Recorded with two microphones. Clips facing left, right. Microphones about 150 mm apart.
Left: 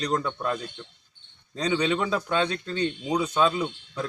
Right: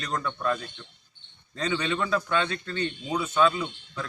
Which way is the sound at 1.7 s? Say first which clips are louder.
Left 2 dB; 15° left (ahead or behind).